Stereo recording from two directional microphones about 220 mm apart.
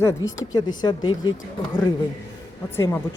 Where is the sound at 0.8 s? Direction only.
20° left (ahead or behind).